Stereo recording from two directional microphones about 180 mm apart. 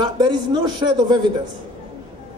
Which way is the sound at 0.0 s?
25° right (ahead or behind).